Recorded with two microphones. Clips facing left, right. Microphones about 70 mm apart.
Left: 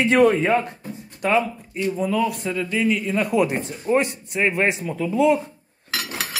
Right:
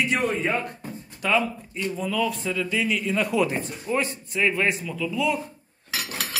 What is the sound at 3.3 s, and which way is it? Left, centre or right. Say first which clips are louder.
Speech: left 4 dB; left.